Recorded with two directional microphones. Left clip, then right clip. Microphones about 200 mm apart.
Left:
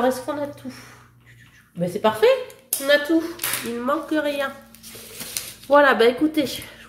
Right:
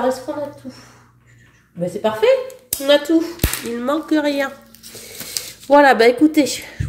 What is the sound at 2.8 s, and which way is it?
A woman's voice, 30° right (ahead or behind).